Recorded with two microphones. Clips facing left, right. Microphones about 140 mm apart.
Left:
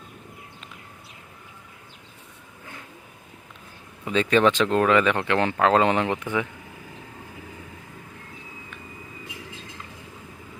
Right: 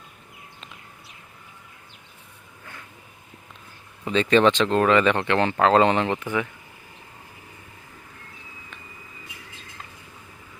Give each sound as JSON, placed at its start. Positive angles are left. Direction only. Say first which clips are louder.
{"t": 4.0, "sound": "speech", "louder": "right 1 dB", "side_deg": 5}
{"t": 6.2, "sound": "speech", "louder": "even", "side_deg": 20}